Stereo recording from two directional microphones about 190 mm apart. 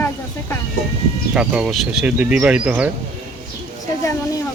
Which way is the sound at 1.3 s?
5° right (ahead or behind).